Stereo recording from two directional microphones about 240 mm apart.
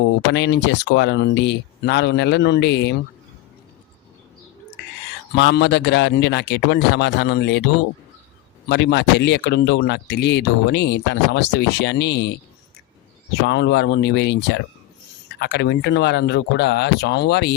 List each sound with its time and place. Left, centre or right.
0.3 s speech: left
5.3 s speech: left
8.7 s speech: left